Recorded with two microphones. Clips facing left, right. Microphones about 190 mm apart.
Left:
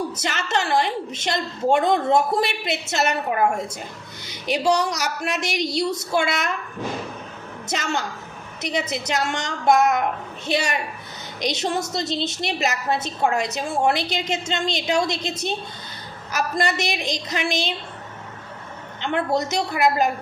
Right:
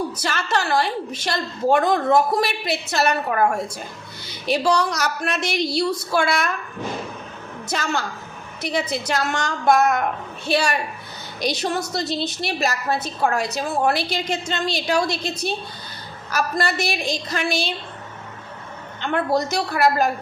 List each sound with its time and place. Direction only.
0.2 s a woman's voice: 20° left (ahead or behind)
7.7 s a woman's voice: 20° left (ahead or behind)
19.0 s a woman's voice: 25° left (ahead or behind)